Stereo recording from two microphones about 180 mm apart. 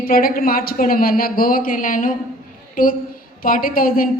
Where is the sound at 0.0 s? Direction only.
55° left (ahead or behind).